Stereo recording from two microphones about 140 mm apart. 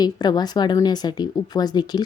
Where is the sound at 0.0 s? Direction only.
30° left (ahead or behind).